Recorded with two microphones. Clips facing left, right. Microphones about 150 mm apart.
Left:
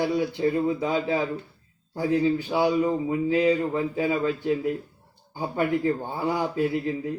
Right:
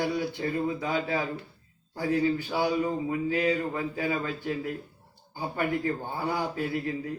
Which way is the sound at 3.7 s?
35° left (ahead or behind).